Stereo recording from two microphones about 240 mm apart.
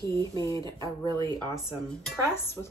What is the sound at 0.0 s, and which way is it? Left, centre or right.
Speech, centre.